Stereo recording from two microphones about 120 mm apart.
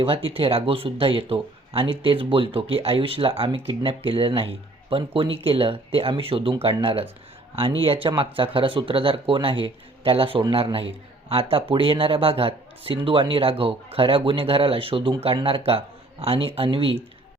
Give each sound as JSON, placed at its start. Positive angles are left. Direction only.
{"t": 0.0, "sound": "speech", "side_deg": -50}